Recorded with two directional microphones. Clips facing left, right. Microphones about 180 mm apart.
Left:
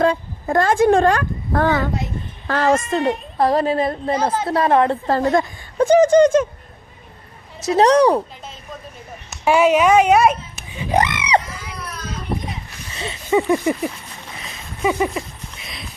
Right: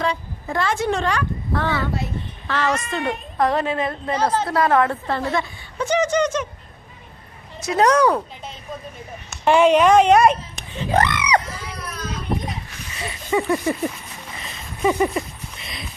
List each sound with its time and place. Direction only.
0.0 s a woman's voice: 50° left (ahead or behind)
4.1 s a woman's voice: 10° left (ahead or behind)
4.4 s a woman's voice: 25° left (ahead or behind)
5.0 s a woman's voice: 40° left (ahead or behind)
7.6 s a woman's voice: 35° left (ahead or behind)
9.4 s speech: 5° left (ahead or behind); by 11.4 s 25° left (ahead or behind)
13.0 s a sound: 20° left (ahead or behind)
14.4 s a sound: 5° left (ahead or behind)